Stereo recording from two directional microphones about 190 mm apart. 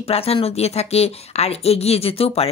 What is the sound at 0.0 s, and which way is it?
Speech, 30° left (ahead or behind).